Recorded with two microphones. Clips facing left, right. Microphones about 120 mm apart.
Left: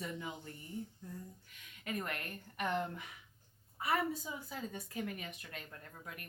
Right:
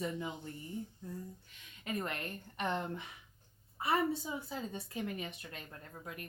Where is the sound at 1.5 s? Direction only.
25° right (ahead or behind).